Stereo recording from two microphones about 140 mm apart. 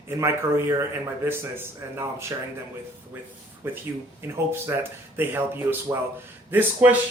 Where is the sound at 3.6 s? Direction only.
15° right (ahead or behind).